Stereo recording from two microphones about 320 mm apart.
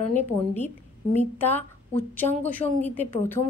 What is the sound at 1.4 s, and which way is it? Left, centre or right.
A woman's voice, centre.